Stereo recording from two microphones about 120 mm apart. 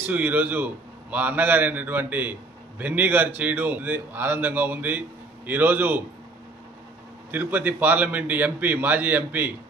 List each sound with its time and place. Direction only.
0.0 s a man's voice: 15° right (ahead or behind)
7.2 s a man's voice: 15° right (ahead or behind)